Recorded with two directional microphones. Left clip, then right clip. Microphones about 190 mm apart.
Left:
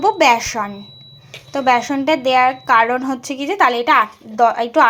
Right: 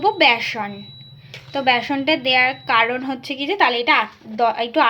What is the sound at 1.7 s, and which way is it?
A woman's voice, 10° left (ahead or behind).